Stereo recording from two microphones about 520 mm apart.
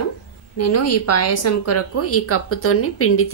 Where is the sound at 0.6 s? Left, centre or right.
Left.